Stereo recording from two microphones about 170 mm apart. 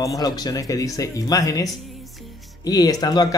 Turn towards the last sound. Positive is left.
turn(degrees=25)  # may be behind; listen again after turning